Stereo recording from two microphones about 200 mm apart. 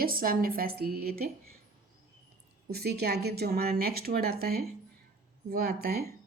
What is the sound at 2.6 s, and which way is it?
A woman's voice, 50° right (ahead or behind).